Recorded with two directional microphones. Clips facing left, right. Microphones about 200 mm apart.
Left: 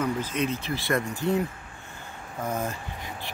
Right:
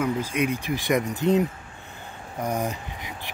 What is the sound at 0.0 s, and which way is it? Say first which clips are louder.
Speech: right 2 dB; 10° right (ahead or behind).